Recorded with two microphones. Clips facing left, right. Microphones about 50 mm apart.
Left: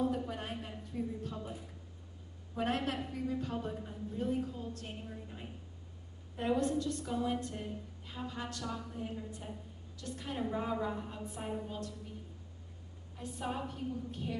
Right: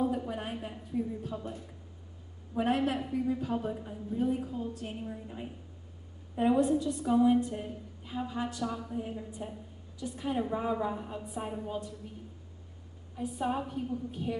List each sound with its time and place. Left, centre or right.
0.0 s a sound: centre
2.5 s a woman's voice: centre
13.1 s a woman's voice: centre